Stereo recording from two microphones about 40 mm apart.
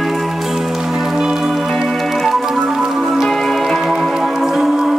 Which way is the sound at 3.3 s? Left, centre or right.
Centre.